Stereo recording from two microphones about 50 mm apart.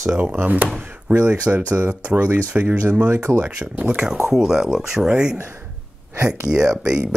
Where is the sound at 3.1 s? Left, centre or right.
Right.